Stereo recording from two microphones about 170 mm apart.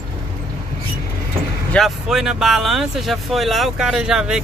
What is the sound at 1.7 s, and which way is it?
Speech, centre (ahead or behind).